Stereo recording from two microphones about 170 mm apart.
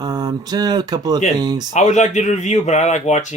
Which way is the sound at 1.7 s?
45° left (ahead or behind).